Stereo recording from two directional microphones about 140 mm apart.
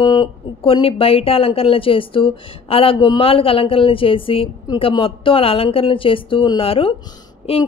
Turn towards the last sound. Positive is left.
turn(degrees=40)  # may be behind; listen again after turning